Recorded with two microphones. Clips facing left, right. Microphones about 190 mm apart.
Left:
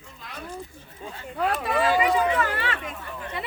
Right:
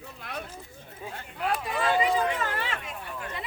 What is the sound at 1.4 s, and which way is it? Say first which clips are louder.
Speech: left 4 dB; 65° left (ahead or behind).